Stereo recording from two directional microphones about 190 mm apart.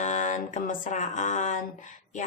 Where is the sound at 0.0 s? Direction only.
40° left (ahead or behind).